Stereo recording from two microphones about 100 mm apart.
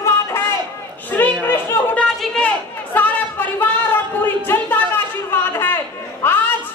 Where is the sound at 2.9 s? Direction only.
20° left (ahead or behind).